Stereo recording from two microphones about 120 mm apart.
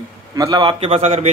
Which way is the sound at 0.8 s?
60° right (ahead or behind).